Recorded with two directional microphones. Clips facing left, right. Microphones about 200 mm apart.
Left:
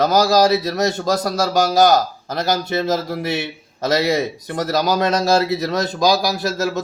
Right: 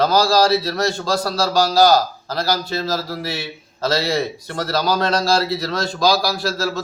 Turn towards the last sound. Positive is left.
turn(degrees=20)  # may be behind; listen again after turning